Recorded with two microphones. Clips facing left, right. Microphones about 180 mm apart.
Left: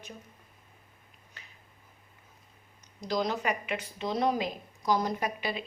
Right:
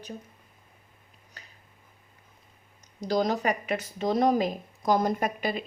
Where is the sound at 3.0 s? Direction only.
40° right (ahead or behind).